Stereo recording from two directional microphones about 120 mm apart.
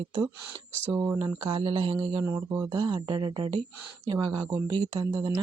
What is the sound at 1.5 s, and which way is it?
Speech, 45° right (ahead or behind).